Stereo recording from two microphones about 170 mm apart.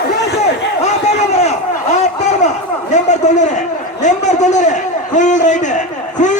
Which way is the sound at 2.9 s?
45° left (ahead or behind).